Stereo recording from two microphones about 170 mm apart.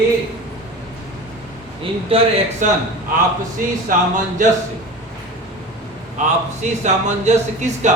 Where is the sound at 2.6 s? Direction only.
45° right (ahead or behind).